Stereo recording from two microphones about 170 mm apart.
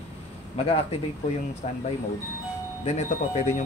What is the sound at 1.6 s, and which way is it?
Speech, 40° left (ahead or behind).